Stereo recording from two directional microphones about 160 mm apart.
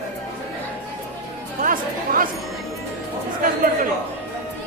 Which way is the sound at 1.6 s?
60° right (ahead or behind).